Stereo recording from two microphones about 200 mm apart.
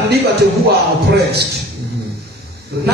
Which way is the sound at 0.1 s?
55° right (ahead or behind).